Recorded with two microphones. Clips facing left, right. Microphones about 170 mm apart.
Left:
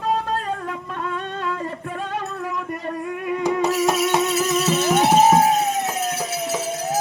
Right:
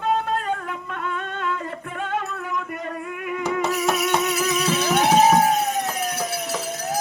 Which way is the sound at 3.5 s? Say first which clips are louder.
Left 3 dB; 35° left (ahead or behind).